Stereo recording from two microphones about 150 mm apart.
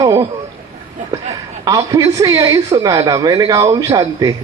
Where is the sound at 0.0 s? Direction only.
20° right (ahead or behind).